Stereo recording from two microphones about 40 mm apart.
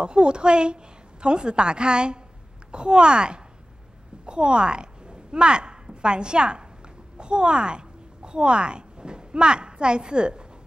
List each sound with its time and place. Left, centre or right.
0.0 s a woman's voice: right